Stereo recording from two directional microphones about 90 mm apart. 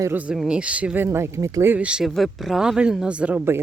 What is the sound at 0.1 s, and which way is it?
Speech, 15° right (ahead or behind).